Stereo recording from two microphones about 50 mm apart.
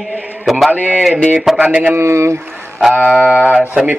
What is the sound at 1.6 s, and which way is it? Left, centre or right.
Speech, right.